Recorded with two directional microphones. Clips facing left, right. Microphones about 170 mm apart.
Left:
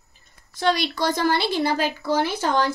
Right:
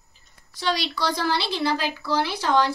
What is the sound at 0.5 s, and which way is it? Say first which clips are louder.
A woman's voice: left 4 dB; 50° left (ahead or behind).